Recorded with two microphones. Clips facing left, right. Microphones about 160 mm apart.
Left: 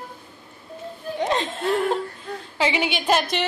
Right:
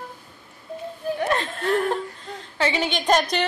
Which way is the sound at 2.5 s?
10° left (ahead or behind).